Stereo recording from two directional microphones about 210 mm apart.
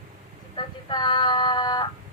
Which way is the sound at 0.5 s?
25° left (ahead or behind).